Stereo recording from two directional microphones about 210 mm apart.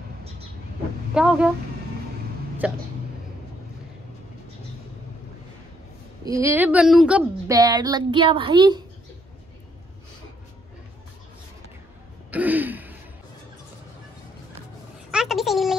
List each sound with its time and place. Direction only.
1.1 s speech: 5° right (ahead or behind)
2.6 s speech: 5° right (ahead or behind)
6.2 s speech: 15° right (ahead or behind)
7.5 s speech: 20° right (ahead or behind)
12.3 s throat clearing: 10° right (ahead or behind)
15.0 s a sound: centre (ahead or behind)